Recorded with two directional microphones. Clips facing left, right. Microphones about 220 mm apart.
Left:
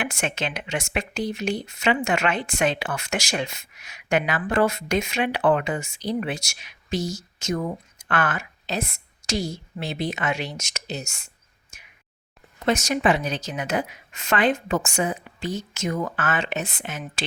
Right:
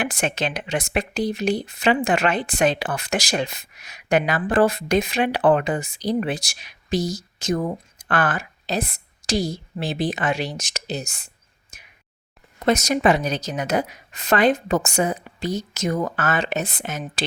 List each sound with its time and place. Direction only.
0.0 s speech: 35° right (ahead or behind)
11.7 s a sound: 35° right (ahead or behind)
12.6 s speech: 40° right (ahead or behind)